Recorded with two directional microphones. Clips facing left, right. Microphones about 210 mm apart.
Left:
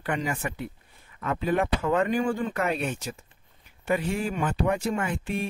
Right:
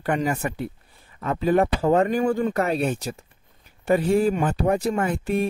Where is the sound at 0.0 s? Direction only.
40° right (ahead or behind).